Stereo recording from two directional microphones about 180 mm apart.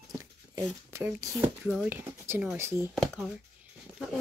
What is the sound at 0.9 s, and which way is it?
Speech, 15° right (ahead or behind).